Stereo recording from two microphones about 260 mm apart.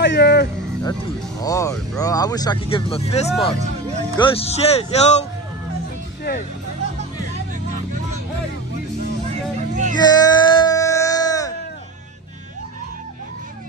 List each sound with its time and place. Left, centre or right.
0.0 s speech: left
1.4 s a man's voice: centre
9.3 s vehicle: right
9.9 s music: centre